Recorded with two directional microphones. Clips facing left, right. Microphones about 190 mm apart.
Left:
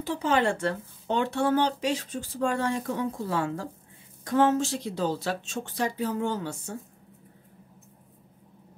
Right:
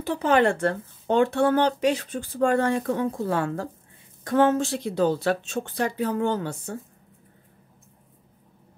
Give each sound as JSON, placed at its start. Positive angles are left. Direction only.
{"t": 0.0, "sound": "speech", "side_deg": -60}